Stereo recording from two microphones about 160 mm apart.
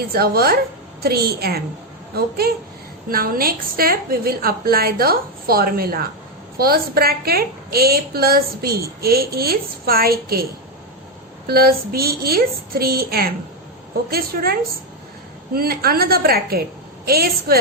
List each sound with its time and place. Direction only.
0.1 s a woman's voice: 75° right (ahead or behind)
3.1 s a woman's voice: 65° right (ahead or behind)
11.4 s a woman's voice: 70° right (ahead or behind)